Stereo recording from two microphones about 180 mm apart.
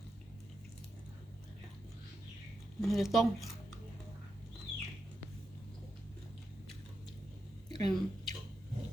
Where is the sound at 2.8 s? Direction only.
Centre (ahead or behind).